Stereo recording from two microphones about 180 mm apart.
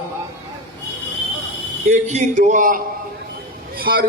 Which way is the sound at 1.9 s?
40° right (ahead or behind).